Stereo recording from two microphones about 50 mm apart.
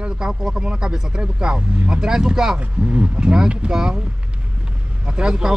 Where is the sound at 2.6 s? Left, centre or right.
Right.